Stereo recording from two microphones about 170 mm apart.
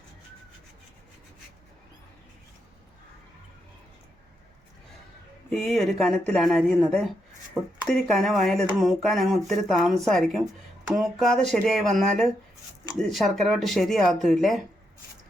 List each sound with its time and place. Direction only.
5.5 s speech: centre (ahead or behind)